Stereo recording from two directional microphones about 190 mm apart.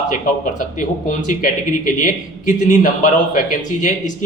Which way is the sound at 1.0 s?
45° left (ahead or behind).